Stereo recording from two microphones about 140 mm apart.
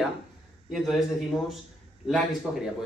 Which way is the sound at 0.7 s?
Centre (ahead or behind).